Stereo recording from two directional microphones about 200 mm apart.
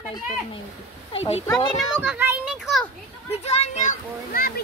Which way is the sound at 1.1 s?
30° left (ahead or behind).